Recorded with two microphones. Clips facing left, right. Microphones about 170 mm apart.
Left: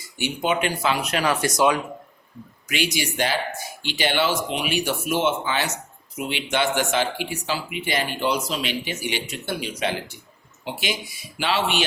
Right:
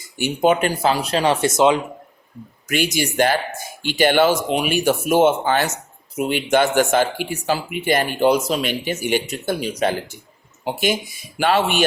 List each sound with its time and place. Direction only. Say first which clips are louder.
0.2 s speech: right 6 dB; 45° right (ahead or behind); by 1.8 s 25° right (ahead or behind)
2.6 s speech: right 5 dB; 45° right (ahead or behind)